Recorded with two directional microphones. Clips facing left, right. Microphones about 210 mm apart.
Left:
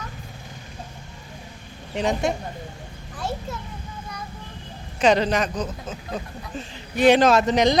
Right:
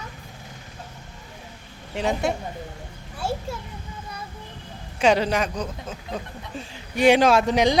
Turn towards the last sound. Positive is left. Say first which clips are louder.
# left 1 dB
turn(degrees=-10)  # may be behind; listen again after turning